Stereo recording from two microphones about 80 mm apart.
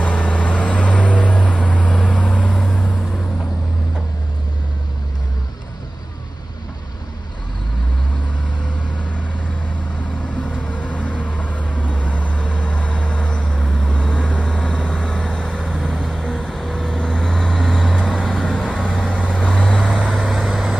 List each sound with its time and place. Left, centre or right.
0.0 s vehicle: centre
10.3 s vehicle: centre
20.2 s vehicle: centre